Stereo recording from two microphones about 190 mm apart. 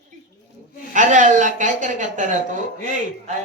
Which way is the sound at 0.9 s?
40° right (ahead or behind).